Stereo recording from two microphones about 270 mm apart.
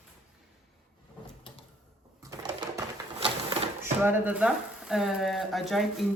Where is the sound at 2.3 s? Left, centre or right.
Centre.